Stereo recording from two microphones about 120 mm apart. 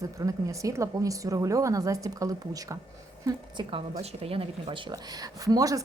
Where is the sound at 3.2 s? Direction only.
45° right (ahead or behind).